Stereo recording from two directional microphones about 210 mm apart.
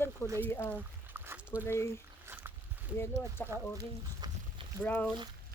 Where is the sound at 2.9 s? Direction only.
10° left (ahead or behind).